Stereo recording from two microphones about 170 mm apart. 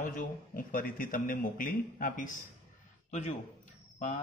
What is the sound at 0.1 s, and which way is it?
A man's voice, 50° left (ahead or behind).